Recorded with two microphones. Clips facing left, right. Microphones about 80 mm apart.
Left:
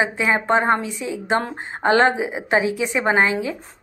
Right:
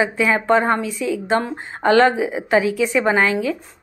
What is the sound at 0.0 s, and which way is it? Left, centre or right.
A woman's voice, left.